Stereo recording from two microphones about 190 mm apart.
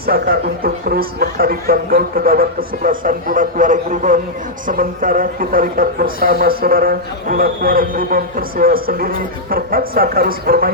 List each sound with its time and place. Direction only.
0.0 s speech: 55° right (ahead or behind)